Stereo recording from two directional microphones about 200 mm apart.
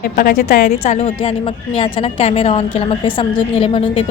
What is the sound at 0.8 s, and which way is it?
A woman's voice, 35° left (ahead or behind).